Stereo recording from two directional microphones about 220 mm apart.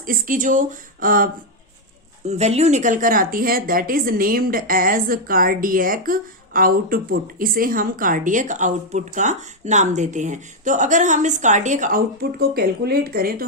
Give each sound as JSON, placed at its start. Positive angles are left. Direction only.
{"t": 0.0, "sound": "speech", "side_deg": -40}